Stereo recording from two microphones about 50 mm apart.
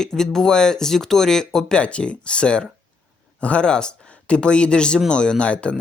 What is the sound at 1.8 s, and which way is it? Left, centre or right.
Speech, left.